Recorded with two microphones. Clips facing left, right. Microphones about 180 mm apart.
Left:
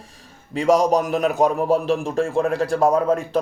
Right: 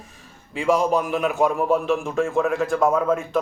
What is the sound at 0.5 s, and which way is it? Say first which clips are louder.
A man's voice: left 3 dB; 40° left (ahead or behind).